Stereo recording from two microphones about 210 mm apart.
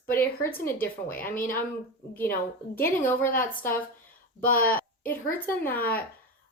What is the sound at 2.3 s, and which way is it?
A woman's voice, 45° left (ahead or behind).